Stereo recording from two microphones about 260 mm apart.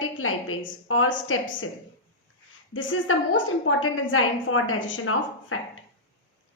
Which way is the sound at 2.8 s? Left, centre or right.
Left.